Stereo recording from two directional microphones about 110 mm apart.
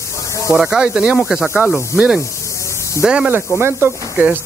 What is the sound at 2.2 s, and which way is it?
Spray, 25° left (ahead or behind).